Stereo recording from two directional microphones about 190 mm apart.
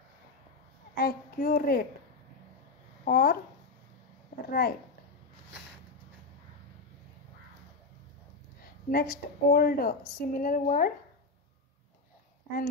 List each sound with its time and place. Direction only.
0.9 s a child's voice: 50° left (ahead or behind)
3.1 s a woman's voice: 50° left (ahead or behind)
4.5 s a woman's voice: 50° left (ahead or behind)
8.9 s a woman's voice: 50° left (ahead or behind)